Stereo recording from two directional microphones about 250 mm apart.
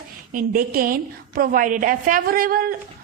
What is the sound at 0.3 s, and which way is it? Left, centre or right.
Speech, right.